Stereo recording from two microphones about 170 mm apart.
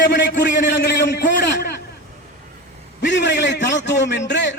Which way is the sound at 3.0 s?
90° left.